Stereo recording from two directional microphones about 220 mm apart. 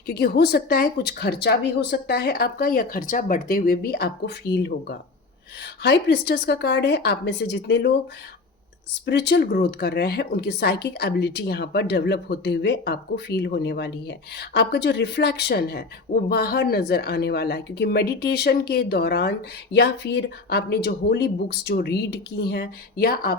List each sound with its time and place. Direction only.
0.1 s speech: 45° left (ahead or behind)
9.0 s speech: 50° left (ahead or behind)